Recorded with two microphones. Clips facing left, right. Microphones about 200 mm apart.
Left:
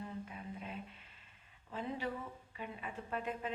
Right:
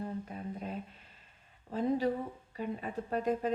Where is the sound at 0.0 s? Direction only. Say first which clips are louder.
Right 6 dB; 40° right (ahead or behind).